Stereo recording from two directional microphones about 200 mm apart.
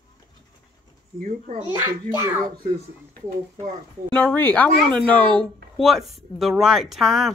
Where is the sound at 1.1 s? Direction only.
40° right (ahead or behind).